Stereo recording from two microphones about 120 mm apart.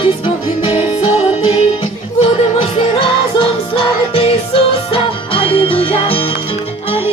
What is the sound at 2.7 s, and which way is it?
Music, 55° left (ahead or behind).